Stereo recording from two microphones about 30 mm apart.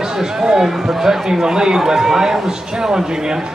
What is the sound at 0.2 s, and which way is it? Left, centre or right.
A man's voice, right.